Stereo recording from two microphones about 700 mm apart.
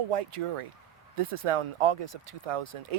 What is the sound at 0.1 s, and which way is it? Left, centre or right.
Speech, right.